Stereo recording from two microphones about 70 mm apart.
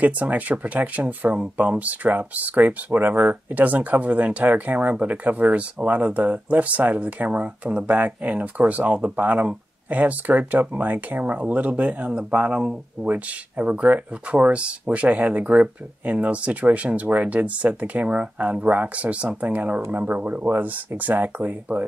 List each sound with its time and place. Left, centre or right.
0.0 s speech: right